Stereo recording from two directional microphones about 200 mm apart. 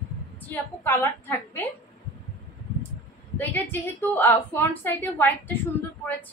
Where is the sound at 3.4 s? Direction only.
10° left (ahead or behind).